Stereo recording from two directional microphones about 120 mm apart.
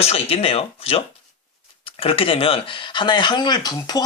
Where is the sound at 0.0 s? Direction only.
55° left (ahead or behind).